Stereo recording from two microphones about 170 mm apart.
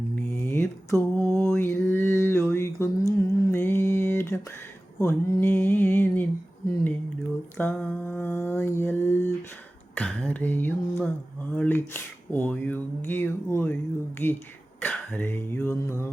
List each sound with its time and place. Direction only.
0.2 s mantra: 15° left (ahead or behind)
5.0 s speech: 15° left (ahead or behind)
7.5 s mantra: 10° left (ahead or behind)
9.9 s a sound: 10° left (ahead or behind)
11.5 s speech: 10° left (ahead or behind)
14.8 s speech: 15° left (ahead or behind)